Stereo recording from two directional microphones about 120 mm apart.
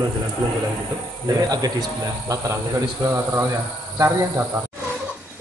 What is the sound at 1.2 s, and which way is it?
Speech, 30° right (ahead or behind).